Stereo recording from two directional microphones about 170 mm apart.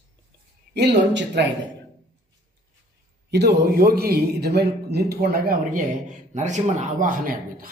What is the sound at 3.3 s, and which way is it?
A man's voice, 75° right (ahead or behind).